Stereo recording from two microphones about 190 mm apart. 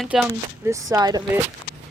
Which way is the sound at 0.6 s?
20° right (ahead or behind).